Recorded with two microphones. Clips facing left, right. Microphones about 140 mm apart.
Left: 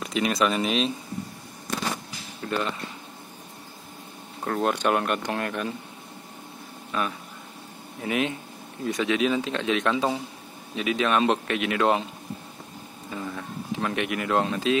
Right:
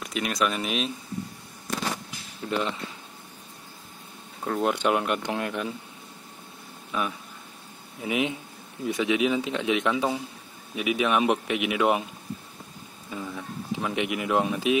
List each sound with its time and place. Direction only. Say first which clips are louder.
0.0 s speech: left 3 dB; centre (ahead or behind)
2.4 s speech: even; 20° right (ahead or behind)
4.5 s speech: even; 10° right (ahead or behind)
6.9 s speech: left 1 dB; 15° right (ahead or behind)
13.1 s speech: left 1 dB; 5° right (ahead or behind)